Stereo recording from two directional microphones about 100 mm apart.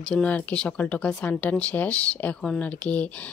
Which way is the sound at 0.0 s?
10° left (ahead or behind).